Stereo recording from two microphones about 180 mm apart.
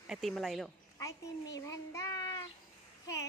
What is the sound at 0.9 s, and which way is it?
A child's voice, 20° left (ahead or behind).